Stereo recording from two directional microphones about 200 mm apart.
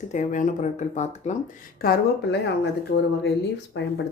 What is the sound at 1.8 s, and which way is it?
Speech, 50° left (ahead or behind).